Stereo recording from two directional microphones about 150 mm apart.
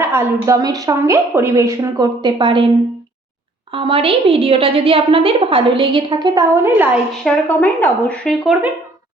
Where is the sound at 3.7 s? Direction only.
35° right (ahead or behind).